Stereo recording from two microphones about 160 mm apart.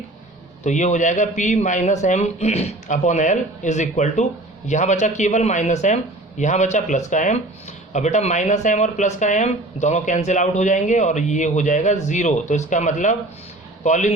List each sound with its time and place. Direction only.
0.6 s speech: 50° left (ahead or behind)